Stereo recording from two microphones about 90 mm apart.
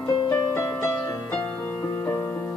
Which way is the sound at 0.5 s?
35° left (ahead or behind).